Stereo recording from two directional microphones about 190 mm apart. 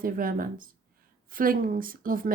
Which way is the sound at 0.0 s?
50° right (ahead or behind).